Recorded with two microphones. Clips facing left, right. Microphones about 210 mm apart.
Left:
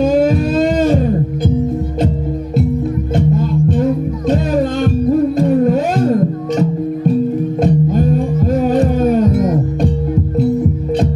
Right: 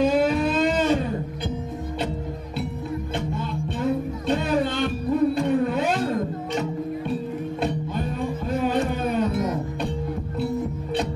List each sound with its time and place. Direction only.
0.0 s guitar: 45° left (ahead or behind)
3.2 s music: 45° left (ahead or behind)